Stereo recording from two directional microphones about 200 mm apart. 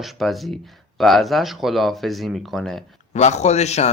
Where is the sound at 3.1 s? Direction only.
35° left (ahead or behind).